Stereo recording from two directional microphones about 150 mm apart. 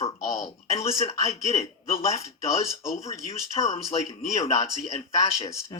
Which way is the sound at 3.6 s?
45° left (ahead or behind).